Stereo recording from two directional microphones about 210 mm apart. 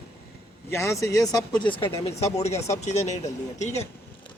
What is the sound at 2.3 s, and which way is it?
Speech, 30° left (ahead or behind).